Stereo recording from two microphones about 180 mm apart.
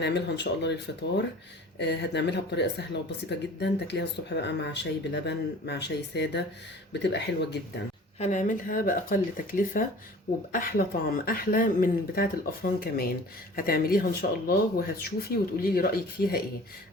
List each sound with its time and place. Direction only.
0.0 s speech: 70° left (ahead or behind)
1.8 s speech: 70° left (ahead or behind)
8.2 s speech: 40° left (ahead or behind)